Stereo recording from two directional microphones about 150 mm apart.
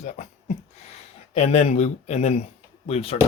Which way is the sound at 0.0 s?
50° left (ahead or behind).